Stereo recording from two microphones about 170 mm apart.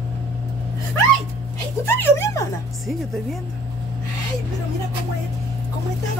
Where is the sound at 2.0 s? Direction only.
15° left (ahead or behind).